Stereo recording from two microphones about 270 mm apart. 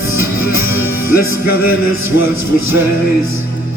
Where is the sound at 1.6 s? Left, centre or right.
Left.